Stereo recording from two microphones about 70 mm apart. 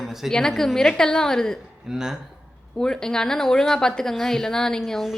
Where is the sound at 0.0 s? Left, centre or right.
Centre.